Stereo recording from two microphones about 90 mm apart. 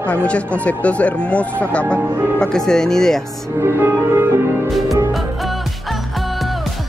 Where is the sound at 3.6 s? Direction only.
30° right (ahead or behind).